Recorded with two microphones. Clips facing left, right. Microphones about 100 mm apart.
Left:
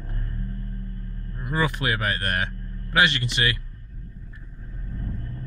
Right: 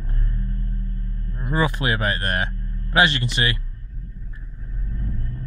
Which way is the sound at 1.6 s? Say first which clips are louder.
Right 3 dB; 20° right (ahead or behind).